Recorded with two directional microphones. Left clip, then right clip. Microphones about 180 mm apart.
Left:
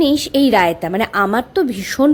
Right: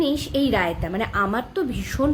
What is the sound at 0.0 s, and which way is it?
A woman's voice, 50° left (ahead or behind).